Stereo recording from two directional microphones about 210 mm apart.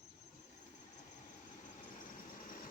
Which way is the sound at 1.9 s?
40° left (ahead or behind).